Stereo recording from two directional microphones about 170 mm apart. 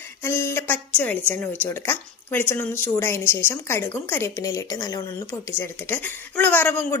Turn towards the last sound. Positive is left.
turn(degrees=10)  # may be behind; listen again after turning